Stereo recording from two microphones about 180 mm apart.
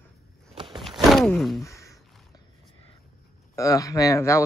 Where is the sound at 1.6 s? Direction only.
15° left (ahead or behind).